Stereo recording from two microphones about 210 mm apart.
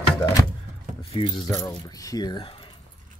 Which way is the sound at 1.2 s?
25° left (ahead or behind).